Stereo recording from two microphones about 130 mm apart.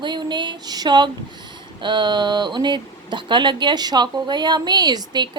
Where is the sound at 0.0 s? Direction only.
35° right (ahead or behind).